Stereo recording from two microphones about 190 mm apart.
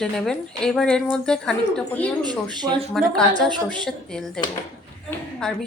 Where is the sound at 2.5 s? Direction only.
20° right (ahead or behind).